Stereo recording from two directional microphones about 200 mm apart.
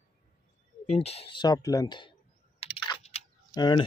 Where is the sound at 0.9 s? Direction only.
30° left (ahead or behind).